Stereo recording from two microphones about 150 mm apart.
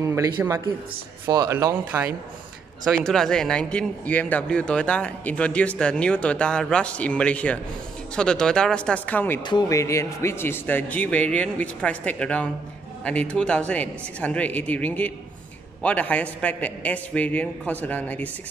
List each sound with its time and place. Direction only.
0.0 s speech: 20° right (ahead or behind)
2.8 s speech: centre (ahead or behind)
9.5 s speech: 25° left (ahead or behind)